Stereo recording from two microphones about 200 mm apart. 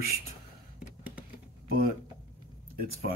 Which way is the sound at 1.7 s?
45° right (ahead or behind).